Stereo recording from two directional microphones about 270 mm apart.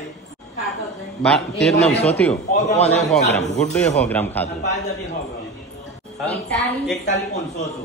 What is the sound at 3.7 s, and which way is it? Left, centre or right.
Speech, centre.